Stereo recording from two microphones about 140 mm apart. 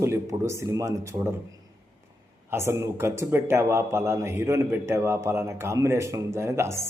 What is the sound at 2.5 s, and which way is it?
A man's voice, 20° right (ahead or behind).